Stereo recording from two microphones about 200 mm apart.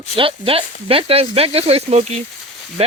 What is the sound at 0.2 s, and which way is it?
A man's voice, 25° right (ahead or behind).